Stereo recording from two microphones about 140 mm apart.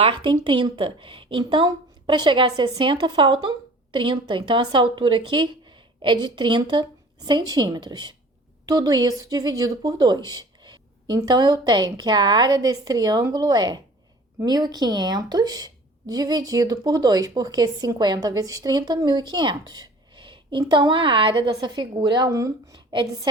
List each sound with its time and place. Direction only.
0.0 s a woman's voice: 35° right (ahead or behind)